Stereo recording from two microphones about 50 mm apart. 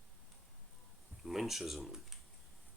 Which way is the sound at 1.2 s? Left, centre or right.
Centre.